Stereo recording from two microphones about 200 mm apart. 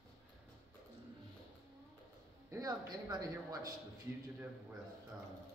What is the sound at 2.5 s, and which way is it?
Speech, 15° right (ahead or behind).